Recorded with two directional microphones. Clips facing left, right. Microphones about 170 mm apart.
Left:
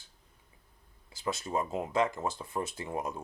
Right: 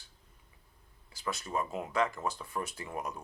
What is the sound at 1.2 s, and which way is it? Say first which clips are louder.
Speech: left 2 dB; 25° left (ahead or behind).